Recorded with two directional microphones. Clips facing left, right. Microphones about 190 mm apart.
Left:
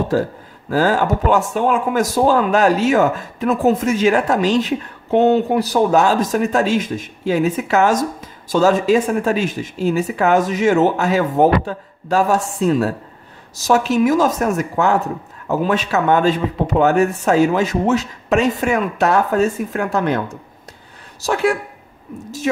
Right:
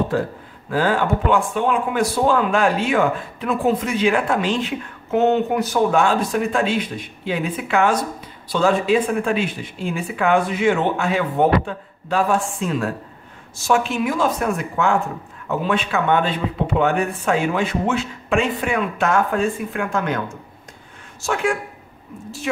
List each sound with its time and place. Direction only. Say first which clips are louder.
0.1 s speech: left 4 dB; 40° left (ahead or behind)
21.2 s speech: left 4 dB; 35° left (ahead or behind)